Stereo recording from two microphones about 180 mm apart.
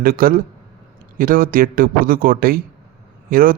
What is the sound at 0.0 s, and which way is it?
Speech, 55° right (ahead or behind).